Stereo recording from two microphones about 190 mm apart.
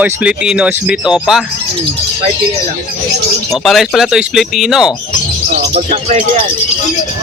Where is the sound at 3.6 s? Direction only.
Centre (ahead or behind).